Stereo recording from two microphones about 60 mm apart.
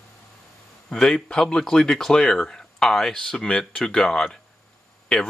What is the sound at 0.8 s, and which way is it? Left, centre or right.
Speech, centre.